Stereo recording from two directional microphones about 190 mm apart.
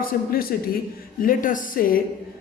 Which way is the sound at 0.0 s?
50° left (ahead or behind).